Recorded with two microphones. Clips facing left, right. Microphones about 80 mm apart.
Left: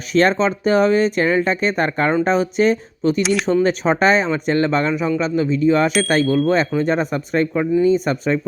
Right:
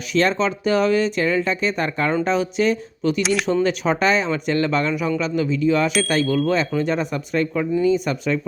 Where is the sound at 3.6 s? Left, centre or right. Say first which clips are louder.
Left 3 dB; left.